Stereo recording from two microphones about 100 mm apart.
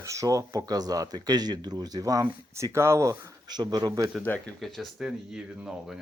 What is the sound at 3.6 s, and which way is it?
Speech, 45° right (ahead or behind).